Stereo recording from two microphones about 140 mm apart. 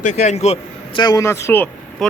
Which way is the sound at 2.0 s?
Centre (ahead or behind).